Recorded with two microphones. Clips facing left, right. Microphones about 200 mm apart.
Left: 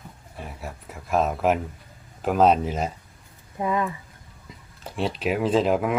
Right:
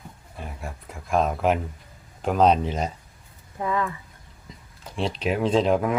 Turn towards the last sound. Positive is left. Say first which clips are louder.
# even
turn(degrees=5)  # may be behind; listen again after turning